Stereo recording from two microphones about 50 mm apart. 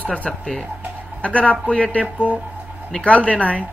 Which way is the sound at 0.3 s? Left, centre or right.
Centre.